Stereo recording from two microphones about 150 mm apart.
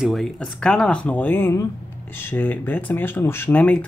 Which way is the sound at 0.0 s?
Centre (ahead or behind).